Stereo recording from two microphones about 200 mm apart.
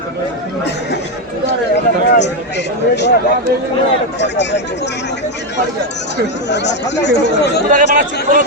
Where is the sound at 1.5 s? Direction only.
60° left (ahead or behind).